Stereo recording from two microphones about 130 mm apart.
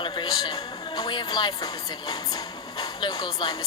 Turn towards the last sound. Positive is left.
turn(degrees=35)  # may be behind; listen again after turning